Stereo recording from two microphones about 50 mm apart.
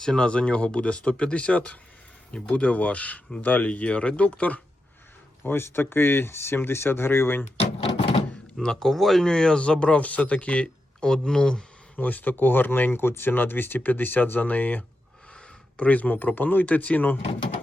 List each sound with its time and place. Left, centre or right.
0.0 s speech: centre; by 4.6 s left
5.4 s speech: left
8.5 s speech: centre
11.9 s speech: left